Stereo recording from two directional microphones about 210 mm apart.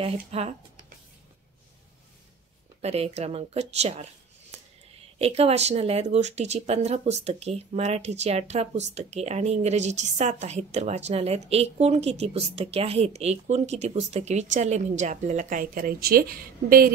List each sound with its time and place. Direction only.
0.0 s speech: 30° right (ahead or behind)
2.8 s speech: 30° right (ahead or behind)